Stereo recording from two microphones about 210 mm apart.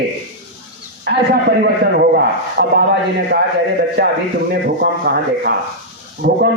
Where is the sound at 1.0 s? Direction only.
50° right (ahead or behind).